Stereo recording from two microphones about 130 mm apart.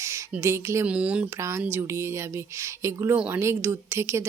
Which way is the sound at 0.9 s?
10° right (ahead or behind).